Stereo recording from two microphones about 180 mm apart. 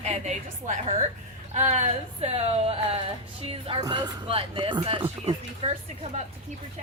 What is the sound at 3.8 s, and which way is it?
Speech, 25° right (ahead or behind).